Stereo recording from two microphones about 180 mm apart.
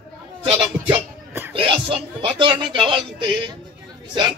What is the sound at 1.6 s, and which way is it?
A man's voice, 30° right (ahead or behind).